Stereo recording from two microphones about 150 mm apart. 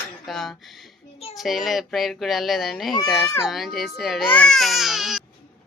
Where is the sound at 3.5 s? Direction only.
Centre (ahead or behind).